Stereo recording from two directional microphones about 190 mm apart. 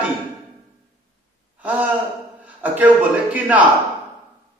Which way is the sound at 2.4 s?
10° right (ahead or behind).